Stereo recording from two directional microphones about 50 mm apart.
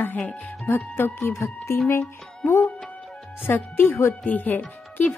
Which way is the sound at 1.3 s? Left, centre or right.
Left.